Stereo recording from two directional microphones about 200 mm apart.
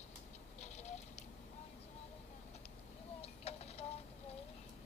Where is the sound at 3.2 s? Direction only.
30° left (ahead or behind).